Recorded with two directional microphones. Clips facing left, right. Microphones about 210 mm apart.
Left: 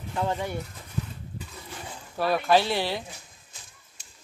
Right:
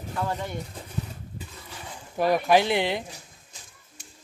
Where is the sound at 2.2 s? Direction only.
15° right (ahead or behind).